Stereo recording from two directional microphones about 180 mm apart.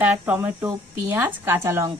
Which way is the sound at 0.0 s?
10° right (ahead or behind).